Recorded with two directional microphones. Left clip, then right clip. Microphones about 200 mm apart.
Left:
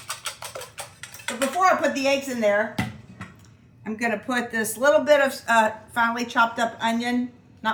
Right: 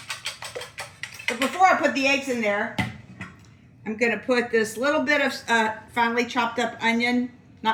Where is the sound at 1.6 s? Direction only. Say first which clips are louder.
Right 2 dB; 30° left (ahead or behind).